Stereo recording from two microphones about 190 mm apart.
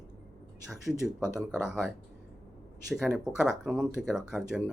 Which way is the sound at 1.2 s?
5° right (ahead or behind).